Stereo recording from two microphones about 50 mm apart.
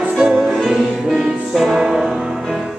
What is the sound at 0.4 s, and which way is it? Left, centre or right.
Music, centre.